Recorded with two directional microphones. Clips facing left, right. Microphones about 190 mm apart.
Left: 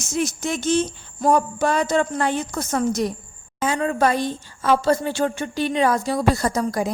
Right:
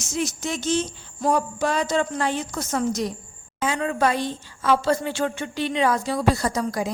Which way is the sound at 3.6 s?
40° left (ahead or behind).